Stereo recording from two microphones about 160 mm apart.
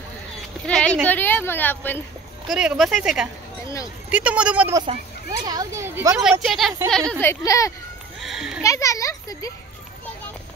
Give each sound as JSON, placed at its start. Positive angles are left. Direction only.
{"t": 0.7, "sound": "a woman's voice", "side_deg": 5}
{"t": 2.5, "sound": "speech", "side_deg": -5}
{"t": 5.4, "sound": "speech", "side_deg": -25}
{"t": 6.4, "sound": "a woman's voice", "side_deg": 0}
{"t": 8.2, "sound": "speech", "side_deg": -5}
{"t": 8.6, "sound": "speech", "side_deg": 20}